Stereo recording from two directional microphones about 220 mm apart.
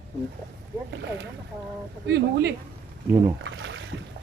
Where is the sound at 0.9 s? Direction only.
55° right (ahead or behind).